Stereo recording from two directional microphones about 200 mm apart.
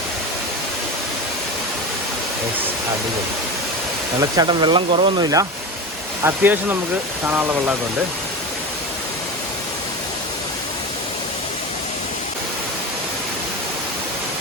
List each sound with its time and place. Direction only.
4.2 s speech: 20° right (ahead or behind)